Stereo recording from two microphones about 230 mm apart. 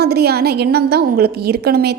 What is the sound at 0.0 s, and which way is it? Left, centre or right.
A woman's voice, right.